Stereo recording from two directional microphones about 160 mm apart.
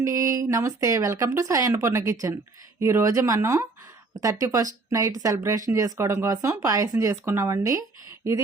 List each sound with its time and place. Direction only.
0.0 s speech: 20° right (ahead or behind)